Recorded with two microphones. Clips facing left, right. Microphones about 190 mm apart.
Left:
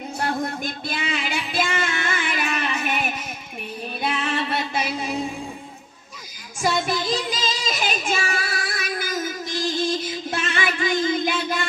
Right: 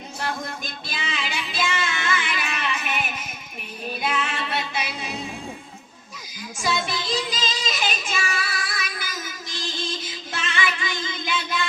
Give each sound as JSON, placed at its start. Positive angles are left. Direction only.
{"t": 0.2, "sound": "music", "side_deg": 55}
{"t": 6.6, "sound": "child singing", "side_deg": 50}
{"t": 10.3, "sound": "music", "side_deg": 50}